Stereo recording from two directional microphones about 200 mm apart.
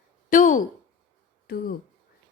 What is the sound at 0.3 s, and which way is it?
Speech, 40° left (ahead or behind).